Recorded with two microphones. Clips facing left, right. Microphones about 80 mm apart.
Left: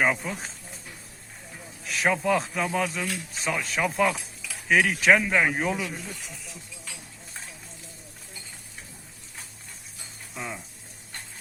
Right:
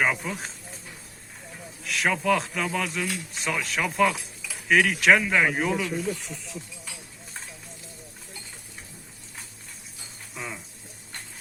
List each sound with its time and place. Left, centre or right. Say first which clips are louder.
0.0 s speech: left 1 dB; centre
2.0 s speech: even; centre
10.3 s a sound: left 1 dB; centre